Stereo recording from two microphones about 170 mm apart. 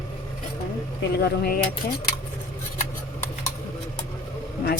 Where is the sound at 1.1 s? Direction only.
65° left (ahead or behind).